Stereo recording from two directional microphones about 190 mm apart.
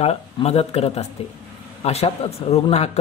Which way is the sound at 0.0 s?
35° left (ahead or behind).